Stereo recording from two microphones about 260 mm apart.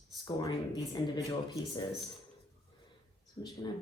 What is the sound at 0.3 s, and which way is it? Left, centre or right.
Speech, centre.